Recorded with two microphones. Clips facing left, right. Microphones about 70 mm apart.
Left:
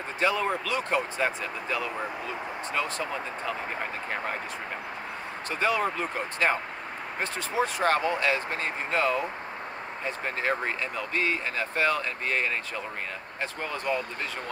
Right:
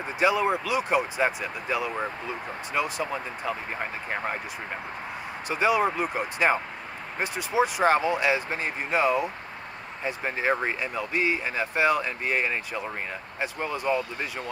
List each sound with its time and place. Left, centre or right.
0.2 s speech: centre
5.5 s speech: centre